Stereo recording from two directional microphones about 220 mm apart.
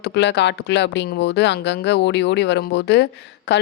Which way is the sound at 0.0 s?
50° left (ahead or behind).